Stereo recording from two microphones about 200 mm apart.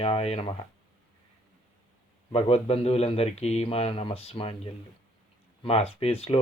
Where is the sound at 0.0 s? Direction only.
30° left (ahead or behind).